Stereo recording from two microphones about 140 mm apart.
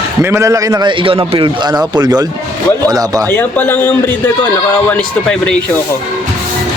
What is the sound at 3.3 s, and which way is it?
A man's voice, 15° left (ahead or behind).